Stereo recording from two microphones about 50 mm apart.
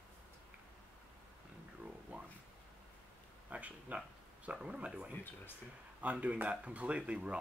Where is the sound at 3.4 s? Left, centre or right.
Right.